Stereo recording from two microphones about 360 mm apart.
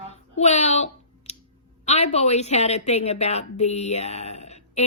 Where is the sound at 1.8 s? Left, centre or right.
Centre.